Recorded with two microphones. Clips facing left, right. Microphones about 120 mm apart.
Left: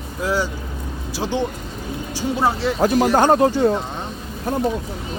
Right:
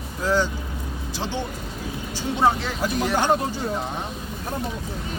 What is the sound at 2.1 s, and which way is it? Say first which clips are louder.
Speech: even; 5° left (ahead or behind).